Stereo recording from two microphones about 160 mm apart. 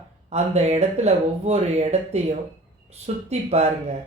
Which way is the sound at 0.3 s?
40° right (ahead or behind).